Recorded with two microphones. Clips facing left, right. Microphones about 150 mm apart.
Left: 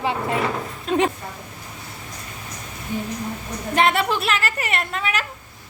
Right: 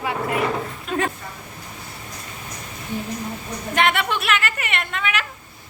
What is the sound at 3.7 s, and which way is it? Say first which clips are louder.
A woman's voice: left 2 dB; 35° left (ahead or behind).